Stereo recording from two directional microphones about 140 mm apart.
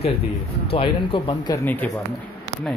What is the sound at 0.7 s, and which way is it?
Speech, 40° left (ahead or behind).